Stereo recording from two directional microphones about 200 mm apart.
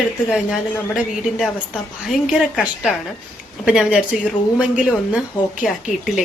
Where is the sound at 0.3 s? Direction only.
Centre (ahead or behind).